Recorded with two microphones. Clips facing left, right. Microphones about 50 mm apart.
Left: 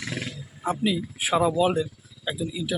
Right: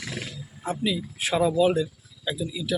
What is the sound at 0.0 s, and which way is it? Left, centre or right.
Roaring cats, centre.